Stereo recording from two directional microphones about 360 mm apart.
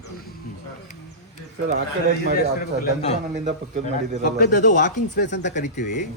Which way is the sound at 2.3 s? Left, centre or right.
Left.